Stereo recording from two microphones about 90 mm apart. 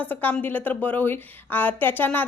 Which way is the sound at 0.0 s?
20° left (ahead or behind).